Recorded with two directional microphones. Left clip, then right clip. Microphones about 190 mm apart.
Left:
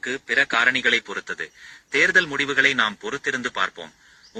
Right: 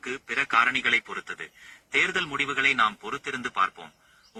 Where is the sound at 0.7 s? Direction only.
5° left (ahead or behind).